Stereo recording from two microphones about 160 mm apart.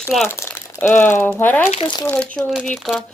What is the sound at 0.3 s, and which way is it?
Speech, 15° left (ahead or behind).